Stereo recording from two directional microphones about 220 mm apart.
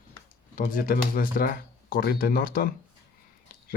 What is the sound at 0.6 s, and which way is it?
Speech, 40° left (ahead or behind).